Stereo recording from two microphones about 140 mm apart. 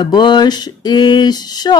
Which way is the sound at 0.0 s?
30° left (ahead or behind).